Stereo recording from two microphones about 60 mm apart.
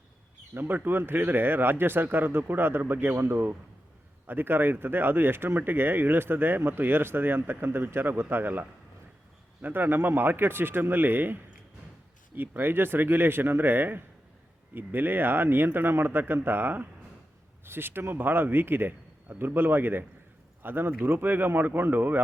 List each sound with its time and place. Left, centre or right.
0.5 s a man's voice: right